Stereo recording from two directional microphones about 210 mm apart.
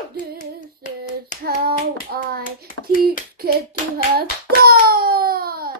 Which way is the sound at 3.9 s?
45° right (ahead or behind).